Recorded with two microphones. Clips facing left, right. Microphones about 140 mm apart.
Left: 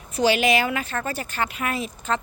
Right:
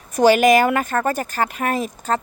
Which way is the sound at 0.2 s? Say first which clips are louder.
Right 7 dB; 45° right (ahead or behind).